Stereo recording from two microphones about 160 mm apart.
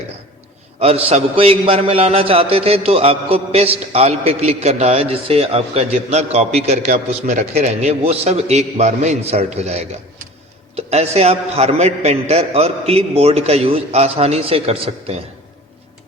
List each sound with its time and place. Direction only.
0.8 s a man's voice: 40° right (ahead or behind)